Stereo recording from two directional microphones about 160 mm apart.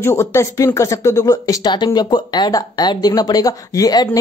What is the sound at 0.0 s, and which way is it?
Speech, 15° left (ahead or behind).